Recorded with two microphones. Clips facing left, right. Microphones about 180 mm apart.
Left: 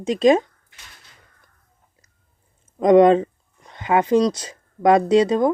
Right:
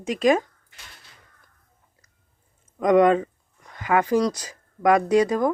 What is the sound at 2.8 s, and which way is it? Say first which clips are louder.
Speech: left 4 dB; 30° left (ahead or behind).